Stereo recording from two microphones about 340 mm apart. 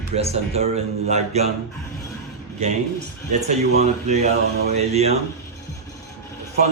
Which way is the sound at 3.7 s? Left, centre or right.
Centre.